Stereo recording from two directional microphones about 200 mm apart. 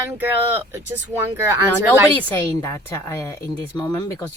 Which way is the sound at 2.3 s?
15° left (ahead or behind).